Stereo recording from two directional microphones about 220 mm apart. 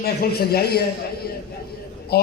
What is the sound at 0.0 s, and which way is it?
Speech, 45° left (ahead or behind).